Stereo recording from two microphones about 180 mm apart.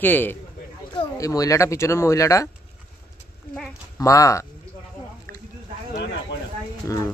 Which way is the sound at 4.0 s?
15° left (ahead or behind).